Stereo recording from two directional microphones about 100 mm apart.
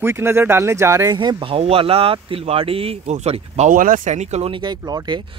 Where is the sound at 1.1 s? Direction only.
60° right (ahead or behind); by 3.6 s 90° right.